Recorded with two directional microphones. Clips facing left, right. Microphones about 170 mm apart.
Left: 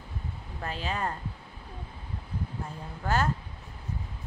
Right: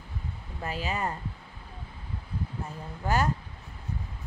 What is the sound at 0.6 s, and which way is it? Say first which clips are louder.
Speech: right 1 dB; 5° right (ahead or behind).